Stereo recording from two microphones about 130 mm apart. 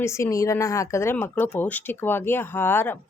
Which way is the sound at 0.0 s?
20° left (ahead or behind).